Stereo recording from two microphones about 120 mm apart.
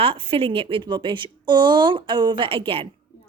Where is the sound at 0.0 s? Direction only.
50° right (ahead or behind).